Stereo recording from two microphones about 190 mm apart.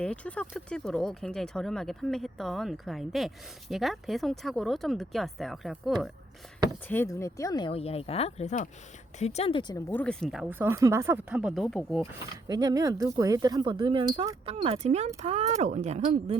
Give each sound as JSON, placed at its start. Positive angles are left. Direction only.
{"t": 0.0, "sound": "speech", "side_deg": 5}
{"t": 6.8, "sound": "speech", "side_deg": 10}
{"t": 9.9, "sound": "speech", "side_deg": 5}
{"t": 12.5, "sound": "speech", "side_deg": -20}